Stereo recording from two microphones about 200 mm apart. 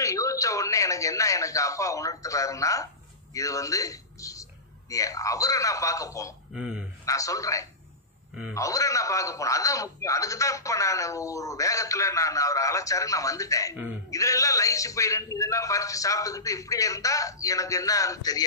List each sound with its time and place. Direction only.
0.0 s a man's voice: 15° left (ahead or behind)
6.5 s speech: 5° right (ahead or behind)
7.1 s speech: 15° left (ahead or behind)